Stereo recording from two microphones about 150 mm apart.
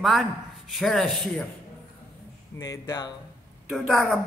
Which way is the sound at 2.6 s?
25° left (ahead or behind).